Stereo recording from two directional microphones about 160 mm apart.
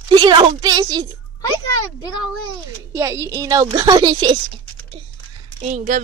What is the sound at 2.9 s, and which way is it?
Speech, 15° right (ahead or behind).